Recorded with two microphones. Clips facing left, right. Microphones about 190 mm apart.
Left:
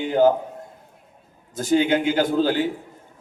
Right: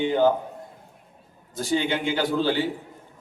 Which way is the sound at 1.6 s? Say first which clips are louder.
Left 6 dB; 45° left (ahead or behind).